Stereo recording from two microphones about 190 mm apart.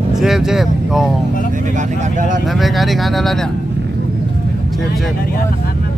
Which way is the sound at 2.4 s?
Centre (ahead or behind).